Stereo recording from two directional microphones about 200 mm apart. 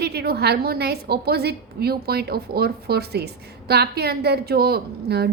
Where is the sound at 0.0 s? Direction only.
55° right (ahead or behind).